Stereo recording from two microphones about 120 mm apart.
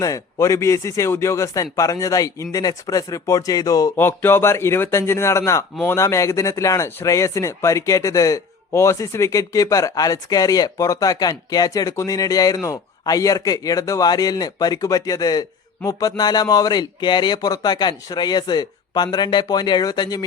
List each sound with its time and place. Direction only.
0.0 s speech: 25° left (ahead or behind)
3.9 s speech: 20° left (ahead or behind); by 20.2 s 35° left (ahead or behind)